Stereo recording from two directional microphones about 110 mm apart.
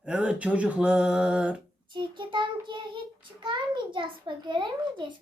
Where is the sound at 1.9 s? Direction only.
45° right (ahead or behind).